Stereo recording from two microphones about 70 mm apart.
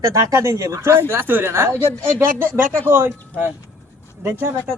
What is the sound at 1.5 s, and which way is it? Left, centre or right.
Speech, right.